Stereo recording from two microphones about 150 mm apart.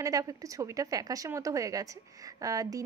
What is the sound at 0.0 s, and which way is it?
A woman's voice, 25° right (ahead or behind).